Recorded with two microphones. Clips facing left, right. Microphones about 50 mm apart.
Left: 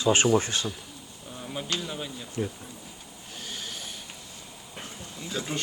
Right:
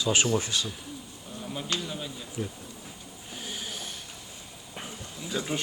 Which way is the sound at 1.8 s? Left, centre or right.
Centre.